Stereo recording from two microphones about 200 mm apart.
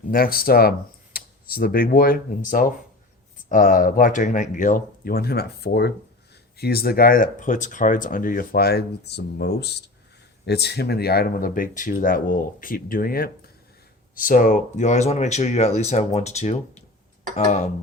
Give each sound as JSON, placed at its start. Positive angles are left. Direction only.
{"t": 0.1, "sound": "speech", "side_deg": 45}